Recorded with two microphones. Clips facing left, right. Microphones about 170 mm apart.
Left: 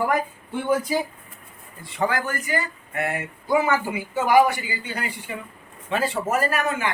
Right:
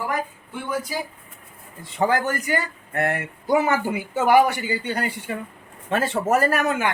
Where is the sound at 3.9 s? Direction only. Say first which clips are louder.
Right 1 dB; 55° right (ahead or behind).